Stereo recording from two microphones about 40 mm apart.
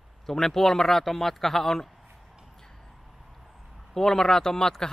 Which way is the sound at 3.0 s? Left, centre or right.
Centre.